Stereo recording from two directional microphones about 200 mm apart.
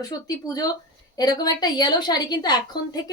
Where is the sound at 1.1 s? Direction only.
20° left (ahead or behind).